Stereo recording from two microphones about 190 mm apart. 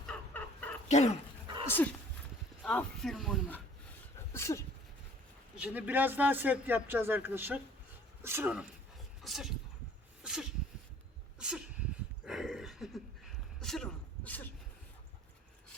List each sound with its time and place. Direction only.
0.1 s dog: 5° left (ahead or behind)
0.9 s speech: 35° left (ahead or behind)
1.6 s speech: 10° left (ahead or behind)
4.3 s a sound: 15° left (ahead or behind)
5.5 s speech: 5° right (ahead or behind)
10.2 s sneeze: 5° right (ahead or behind)
11.3 s a sound: 5° right (ahead or behind)